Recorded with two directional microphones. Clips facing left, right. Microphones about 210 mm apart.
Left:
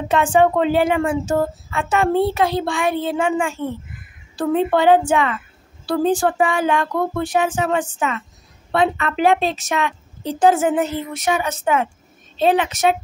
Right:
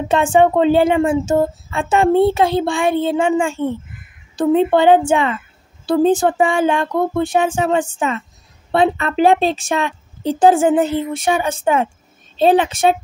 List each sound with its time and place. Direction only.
0.1 s a woman's voice: 25° right (ahead or behind)